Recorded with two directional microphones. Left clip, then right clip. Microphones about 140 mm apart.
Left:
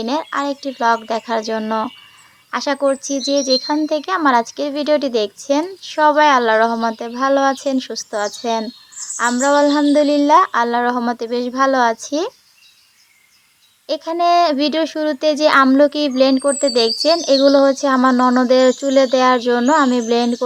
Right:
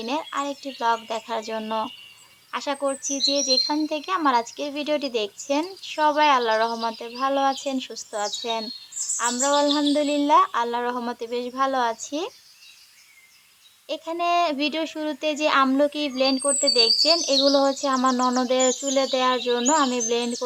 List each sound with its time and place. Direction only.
0.0 s speech: 35° left (ahead or behind)
13.8 s speech: 35° left (ahead or behind)